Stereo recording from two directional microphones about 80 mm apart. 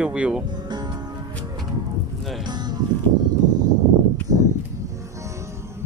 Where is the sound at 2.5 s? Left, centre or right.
Right.